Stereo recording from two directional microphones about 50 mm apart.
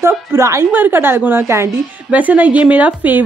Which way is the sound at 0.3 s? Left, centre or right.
Right.